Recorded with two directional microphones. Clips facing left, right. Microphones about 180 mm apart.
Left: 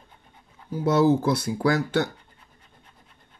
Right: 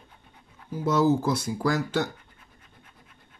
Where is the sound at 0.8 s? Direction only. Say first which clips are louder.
Left 3 dB; 65° left (ahead or behind).